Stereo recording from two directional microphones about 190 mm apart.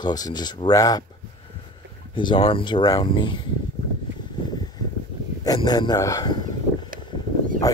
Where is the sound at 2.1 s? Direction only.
25° left (ahead or behind).